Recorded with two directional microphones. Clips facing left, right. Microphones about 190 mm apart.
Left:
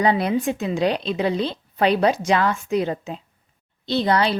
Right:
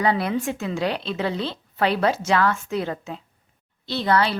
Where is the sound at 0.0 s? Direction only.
20° left (ahead or behind).